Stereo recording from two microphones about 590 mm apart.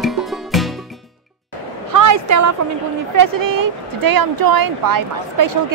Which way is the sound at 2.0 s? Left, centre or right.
Right.